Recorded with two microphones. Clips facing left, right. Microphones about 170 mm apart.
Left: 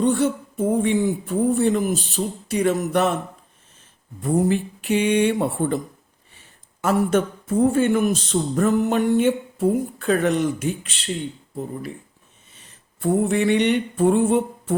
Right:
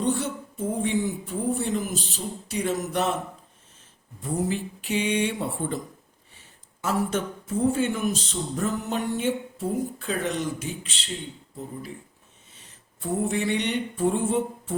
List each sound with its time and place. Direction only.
0.0 s a sound: 55° left (ahead or behind)
1.5 s speech: 60° left (ahead or behind)
4.2 s speech: 55° left (ahead or behind)
6.8 s speech: 55° left (ahead or behind)
13.0 s speech: 65° left (ahead or behind)